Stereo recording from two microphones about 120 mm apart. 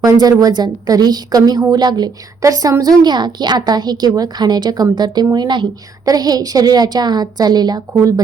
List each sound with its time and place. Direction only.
0.0 s a woman's voice: 30° right (ahead or behind)